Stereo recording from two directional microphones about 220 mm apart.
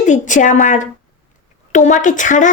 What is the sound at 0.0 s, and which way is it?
A woman's voice, 35° left (ahead or behind).